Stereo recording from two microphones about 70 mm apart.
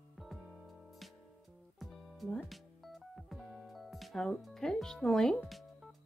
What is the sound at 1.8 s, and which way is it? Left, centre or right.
Music, centre.